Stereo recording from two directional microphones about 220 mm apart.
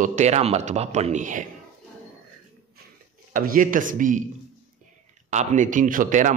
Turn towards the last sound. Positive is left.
turn(degrees=-35)  # may be behind; listen again after turning